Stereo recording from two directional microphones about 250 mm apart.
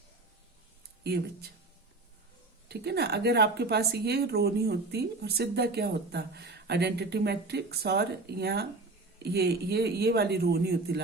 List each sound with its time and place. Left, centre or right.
1.0 s a woman's voice: right
2.6 s a woman's voice: right